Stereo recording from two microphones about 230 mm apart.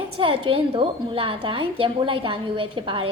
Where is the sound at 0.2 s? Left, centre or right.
Right.